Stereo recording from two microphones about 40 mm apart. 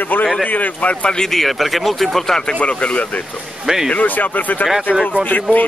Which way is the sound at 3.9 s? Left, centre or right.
Left.